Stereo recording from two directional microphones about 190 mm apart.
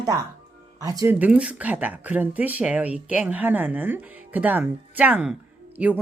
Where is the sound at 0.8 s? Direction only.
20° right (ahead or behind).